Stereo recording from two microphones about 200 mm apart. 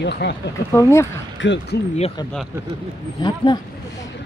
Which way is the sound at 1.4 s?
65° left (ahead or behind).